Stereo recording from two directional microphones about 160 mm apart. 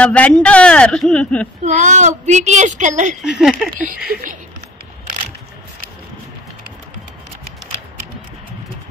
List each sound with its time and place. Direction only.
0.0 s a man's voice: 10° left (ahead or behind)
1.6 s a woman's voice: 50° right (ahead or behind)
3.3 s speech: centre (ahead or behind)
4.1 s speech: 55° right (ahead or behind)